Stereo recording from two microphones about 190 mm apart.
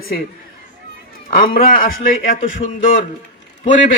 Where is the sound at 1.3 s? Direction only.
50° left (ahead or behind).